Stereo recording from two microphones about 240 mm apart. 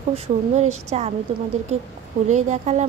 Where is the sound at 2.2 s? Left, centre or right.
Right.